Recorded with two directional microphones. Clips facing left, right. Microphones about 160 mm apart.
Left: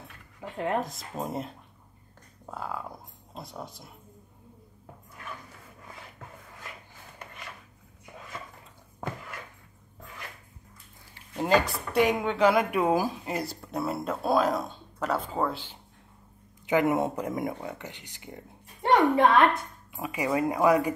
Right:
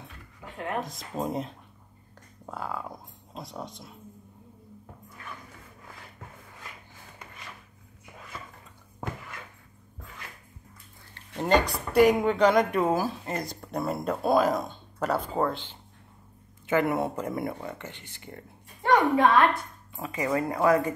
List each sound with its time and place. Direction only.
0.7 s speech: centre (ahead or behind)
2.5 s speech: centre (ahead or behind)
11.1 s speech: 5° left (ahead or behind)